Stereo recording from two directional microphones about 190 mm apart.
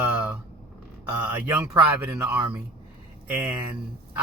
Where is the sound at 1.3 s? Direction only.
10° right (ahead or behind).